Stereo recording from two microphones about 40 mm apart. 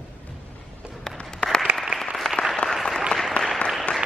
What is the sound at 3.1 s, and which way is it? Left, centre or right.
Applause, centre.